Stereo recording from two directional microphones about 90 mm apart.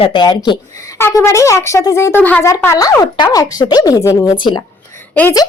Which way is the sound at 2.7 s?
40° left (ahead or behind).